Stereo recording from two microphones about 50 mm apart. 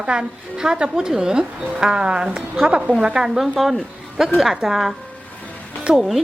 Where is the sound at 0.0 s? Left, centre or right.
Centre.